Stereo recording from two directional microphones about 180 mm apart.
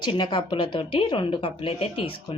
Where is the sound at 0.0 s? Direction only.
25° left (ahead or behind).